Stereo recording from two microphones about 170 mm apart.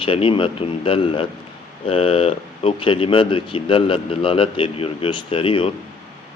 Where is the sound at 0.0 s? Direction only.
30° left (ahead or behind).